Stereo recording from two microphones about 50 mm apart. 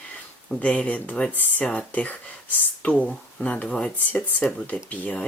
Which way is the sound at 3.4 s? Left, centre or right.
Left.